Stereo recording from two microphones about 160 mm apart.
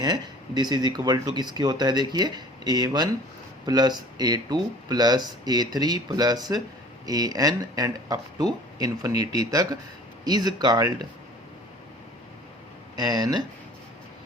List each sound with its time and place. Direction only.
0.0 s speech: 25° right (ahead or behind)
13.0 s speech: 25° right (ahead or behind)